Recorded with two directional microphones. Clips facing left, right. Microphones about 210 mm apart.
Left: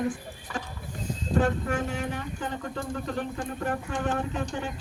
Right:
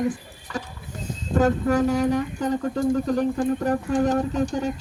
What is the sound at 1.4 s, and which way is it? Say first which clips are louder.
Speech: right 8 dB; 40° right (ahead or behind).